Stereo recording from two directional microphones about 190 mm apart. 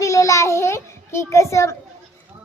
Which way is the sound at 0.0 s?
15° left (ahead or behind).